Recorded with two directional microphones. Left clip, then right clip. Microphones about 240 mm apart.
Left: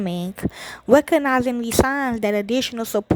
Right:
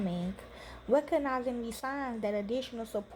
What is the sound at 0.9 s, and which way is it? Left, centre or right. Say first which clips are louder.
Speech: left 13 dB; left.